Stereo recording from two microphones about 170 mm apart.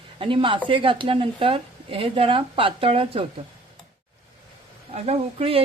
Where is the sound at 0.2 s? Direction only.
30° right (ahead or behind).